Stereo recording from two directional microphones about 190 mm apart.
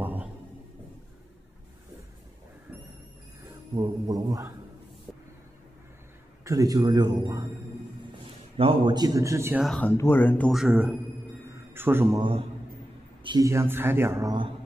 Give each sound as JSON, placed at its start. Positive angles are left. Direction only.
{"t": 0.0, "sound": "a sound", "side_deg": -10}
{"t": 3.7, "sound": "a man's voice", "side_deg": -20}
{"t": 6.4, "sound": "a man's voice", "side_deg": -20}
{"t": 9.6, "sound": "speech", "side_deg": 5}
{"t": 11.5, "sound": "a sound", "side_deg": -10}
{"t": 12.2, "sound": "a man's voice", "side_deg": -30}